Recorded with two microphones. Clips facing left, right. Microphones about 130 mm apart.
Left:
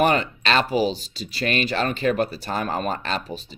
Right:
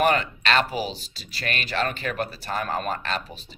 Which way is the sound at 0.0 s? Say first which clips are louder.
Left 2 dB; 25° left (ahead or behind).